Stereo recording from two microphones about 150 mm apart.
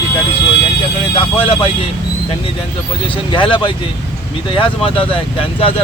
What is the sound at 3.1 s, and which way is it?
Speech, 35° left (ahead or behind).